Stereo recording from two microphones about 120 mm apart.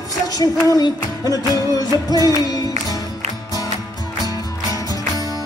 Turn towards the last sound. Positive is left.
turn(degrees=30)  # may be behind; listen again after turning